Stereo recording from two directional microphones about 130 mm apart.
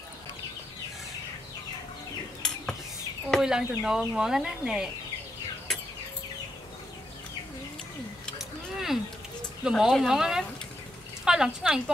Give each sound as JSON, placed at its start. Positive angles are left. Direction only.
{"t": 2.4, "sound": "cutlery", "side_deg": 5}
{"t": 3.3, "sound": "speech", "side_deg": 0}
{"t": 8.4, "sound": "a sound", "side_deg": -5}
{"t": 9.7, "sound": "speech", "side_deg": -5}